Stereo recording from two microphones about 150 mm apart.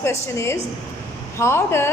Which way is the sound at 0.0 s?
20° left (ahead or behind).